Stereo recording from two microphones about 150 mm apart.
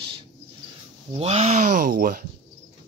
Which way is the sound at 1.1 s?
45° right (ahead or behind).